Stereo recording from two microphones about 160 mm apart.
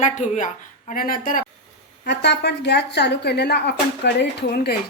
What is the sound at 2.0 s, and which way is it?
A woman's voice, 90° left.